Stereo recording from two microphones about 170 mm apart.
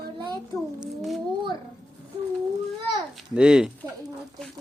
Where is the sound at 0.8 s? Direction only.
Centre (ahead or behind).